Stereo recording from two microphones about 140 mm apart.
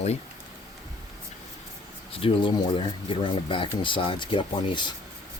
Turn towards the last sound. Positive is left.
turn(degrees=35)  # may be behind; listen again after turning